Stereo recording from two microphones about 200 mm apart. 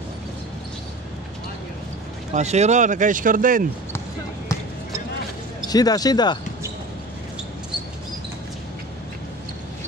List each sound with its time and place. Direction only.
2.3 s speech: 35° right (ahead or behind)
5.7 s speech: 20° left (ahead or behind)